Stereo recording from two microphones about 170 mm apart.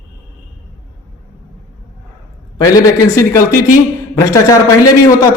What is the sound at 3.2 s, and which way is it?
A man's voice, 15° left (ahead or behind).